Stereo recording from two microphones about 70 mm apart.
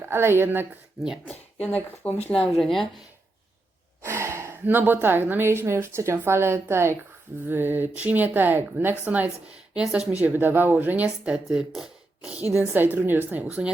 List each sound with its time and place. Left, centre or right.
0.0 s a woman's voice: right
1.2 s speech: left
2.4 s speech: centre
4.0 s gasp: right
4.6 s a woman's voice: right
11.4 s speech: centre
12.5 s speech: right